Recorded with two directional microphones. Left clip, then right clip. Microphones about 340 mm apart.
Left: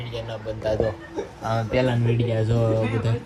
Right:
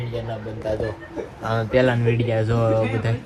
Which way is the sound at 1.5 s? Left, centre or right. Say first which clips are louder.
Right 4 dB; centre.